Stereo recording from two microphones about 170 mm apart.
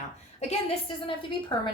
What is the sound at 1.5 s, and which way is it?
Speech, 25° left (ahead or behind).